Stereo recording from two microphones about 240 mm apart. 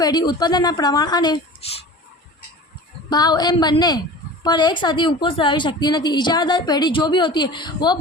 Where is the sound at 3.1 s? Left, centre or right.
Centre.